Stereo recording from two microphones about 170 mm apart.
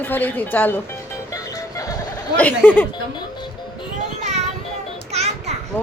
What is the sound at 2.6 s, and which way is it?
Speech, 10° left (ahead or behind).